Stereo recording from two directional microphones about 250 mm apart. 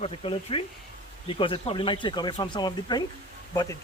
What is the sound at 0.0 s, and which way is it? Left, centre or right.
Speech, left.